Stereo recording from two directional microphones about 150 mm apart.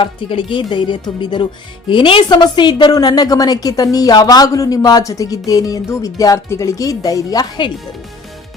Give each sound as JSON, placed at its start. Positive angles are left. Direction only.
{"t": 0.0, "sound": "a woman's voice", "side_deg": 35}